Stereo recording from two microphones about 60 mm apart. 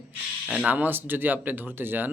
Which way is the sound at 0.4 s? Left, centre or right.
Right.